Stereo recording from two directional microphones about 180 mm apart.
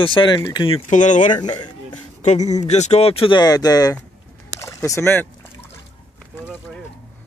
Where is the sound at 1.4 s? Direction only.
25° left (ahead or behind).